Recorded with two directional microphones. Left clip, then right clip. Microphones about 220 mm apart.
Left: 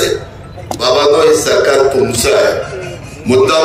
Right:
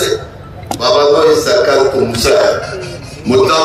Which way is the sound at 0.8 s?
50° left (ahead or behind).